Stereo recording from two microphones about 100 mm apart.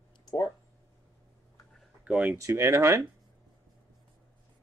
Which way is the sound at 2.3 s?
30° right (ahead or behind).